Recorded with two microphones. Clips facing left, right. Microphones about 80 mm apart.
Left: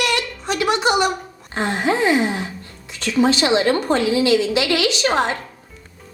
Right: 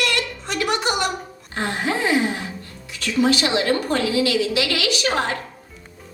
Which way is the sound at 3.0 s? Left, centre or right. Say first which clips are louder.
Left 2 dB; left.